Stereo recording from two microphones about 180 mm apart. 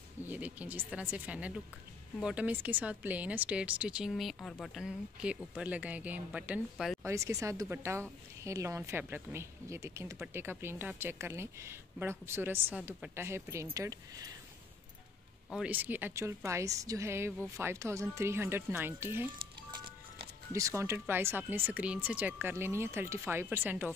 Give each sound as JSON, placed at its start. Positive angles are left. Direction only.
{"t": 0.3, "sound": "speech", "side_deg": -10}
{"t": 7.0, "sound": "speech", "side_deg": -15}
{"t": 15.5, "sound": "speech", "side_deg": -5}
{"t": 20.5, "sound": "speech", "side_deg": -15}